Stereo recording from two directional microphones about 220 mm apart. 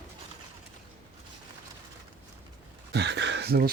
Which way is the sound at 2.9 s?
50° right (ahead or behind).